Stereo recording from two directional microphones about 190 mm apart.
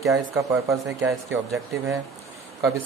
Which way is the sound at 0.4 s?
15° right (ahead or behind).